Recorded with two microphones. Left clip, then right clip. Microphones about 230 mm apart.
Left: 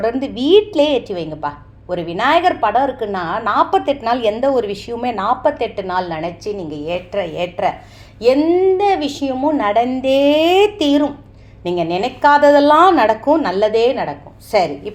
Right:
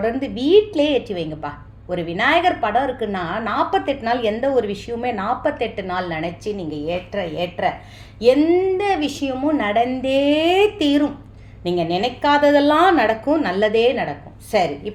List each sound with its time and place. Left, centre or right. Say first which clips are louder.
0.0 s a woman's voice: left 3 dB; left